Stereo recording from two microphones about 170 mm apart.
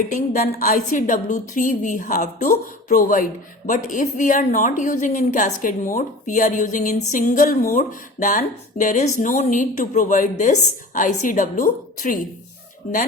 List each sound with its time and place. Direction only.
0.1 s speech: 55° left (ahead or behind)